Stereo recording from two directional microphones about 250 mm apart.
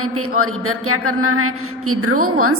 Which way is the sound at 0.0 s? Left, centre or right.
Right.